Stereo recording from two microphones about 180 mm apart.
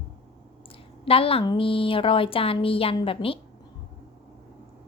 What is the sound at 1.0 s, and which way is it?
A woman's voice, 30° left (ahead or behind).